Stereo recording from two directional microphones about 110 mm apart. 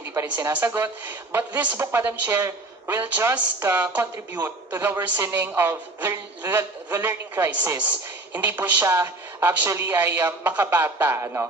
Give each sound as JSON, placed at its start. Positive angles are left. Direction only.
{"t": 0.1, "sound": "a woman's voice", "side_deg": -20}